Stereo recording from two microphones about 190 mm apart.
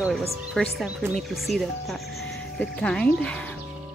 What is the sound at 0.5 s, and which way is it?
Speech, centre (ahead or behind).